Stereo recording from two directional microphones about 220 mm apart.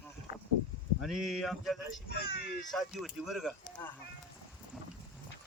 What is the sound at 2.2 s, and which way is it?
Speech, 40° left (ahead or behind).